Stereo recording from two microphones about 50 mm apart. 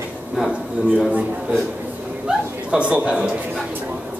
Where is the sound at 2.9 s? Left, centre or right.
Right.